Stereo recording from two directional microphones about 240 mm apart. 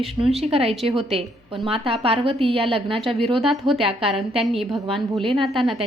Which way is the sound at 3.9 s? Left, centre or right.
Right.